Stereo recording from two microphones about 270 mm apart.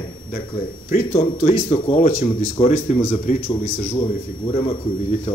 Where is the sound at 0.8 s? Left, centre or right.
Left.